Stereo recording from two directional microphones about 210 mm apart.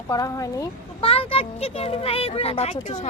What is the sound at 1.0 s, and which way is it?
A child's voice, 25° left (ahead or behind).